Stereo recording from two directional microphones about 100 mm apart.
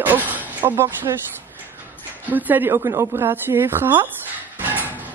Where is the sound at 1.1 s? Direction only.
40° right (ahead or behind).